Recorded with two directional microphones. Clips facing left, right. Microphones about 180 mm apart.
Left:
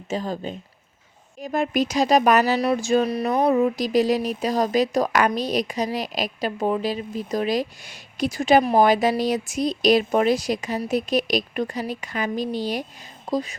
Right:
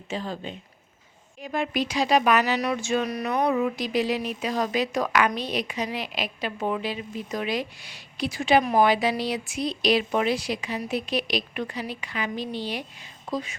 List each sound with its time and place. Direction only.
0.1 s speech: 40° left (ahead or behind)